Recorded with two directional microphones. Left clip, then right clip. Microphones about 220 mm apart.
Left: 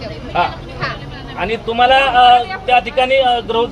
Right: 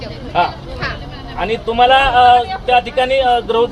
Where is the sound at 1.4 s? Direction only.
20° right (ahead or behind).